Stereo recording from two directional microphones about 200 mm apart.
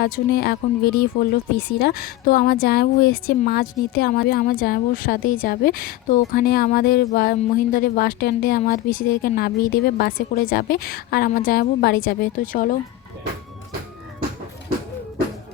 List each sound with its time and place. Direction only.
0.0 s speech: 55° left (ahead or behind)